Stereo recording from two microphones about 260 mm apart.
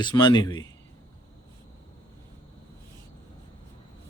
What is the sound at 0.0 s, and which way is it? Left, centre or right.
Speech, centre.